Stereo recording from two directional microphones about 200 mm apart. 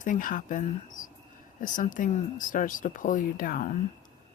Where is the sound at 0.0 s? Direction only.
40° left (ahead or behind).